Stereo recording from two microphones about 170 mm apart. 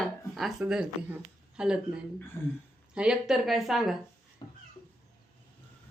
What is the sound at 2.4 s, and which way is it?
Speech, 15° left (ahead or behind).